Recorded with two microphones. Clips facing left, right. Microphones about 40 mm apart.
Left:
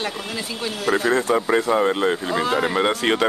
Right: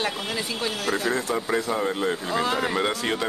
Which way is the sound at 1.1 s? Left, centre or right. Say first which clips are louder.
Left 6 dB; left.